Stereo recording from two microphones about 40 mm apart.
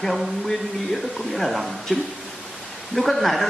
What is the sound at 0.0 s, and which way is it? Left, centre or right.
Speech, centre.